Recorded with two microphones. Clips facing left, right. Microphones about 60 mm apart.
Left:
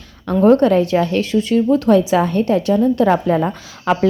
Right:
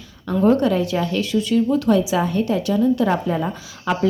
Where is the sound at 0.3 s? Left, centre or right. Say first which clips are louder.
Left 5 dB; left.